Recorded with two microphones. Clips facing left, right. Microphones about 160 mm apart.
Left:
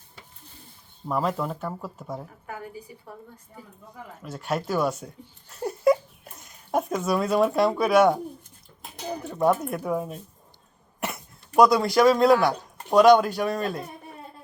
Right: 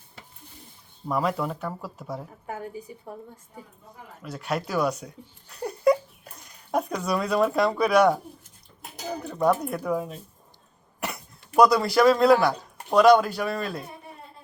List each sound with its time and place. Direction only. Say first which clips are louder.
1.1 s speech: even; 10° right (ahead or behind)
4.2 s speech: even; centre (ahead or behind)
5.5 s a sound: even; 5° left (ahead or behind)
9.6 s speech: even; centre (ahead or behind)
11.0 s cough: left 1 dB; centre (ahead or behind)
12.2 s speech: even; centre (ahead or behind)